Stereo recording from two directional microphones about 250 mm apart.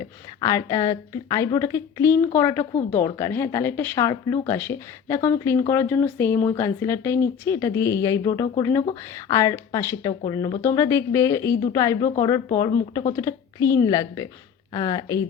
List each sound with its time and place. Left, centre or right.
0.4 s speech: centre